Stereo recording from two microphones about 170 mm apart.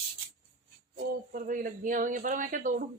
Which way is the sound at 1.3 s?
55° right (ahead or behind).